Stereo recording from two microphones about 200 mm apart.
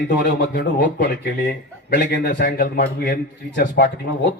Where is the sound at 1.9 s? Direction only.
50° left (ahead or behind).